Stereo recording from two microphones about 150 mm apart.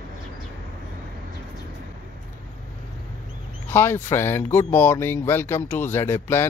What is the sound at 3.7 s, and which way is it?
Speech, 15° left (ahead or behind).